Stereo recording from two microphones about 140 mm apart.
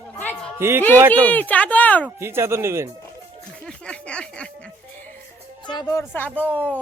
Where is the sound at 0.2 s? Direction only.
10° left (ahead or behind).